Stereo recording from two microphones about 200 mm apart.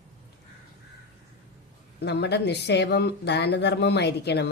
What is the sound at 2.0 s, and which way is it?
Speech, 55° left (ahead or behind).